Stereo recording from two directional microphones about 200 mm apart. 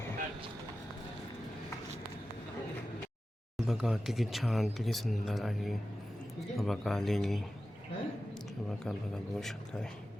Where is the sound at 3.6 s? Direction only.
Centre (ahead or behind).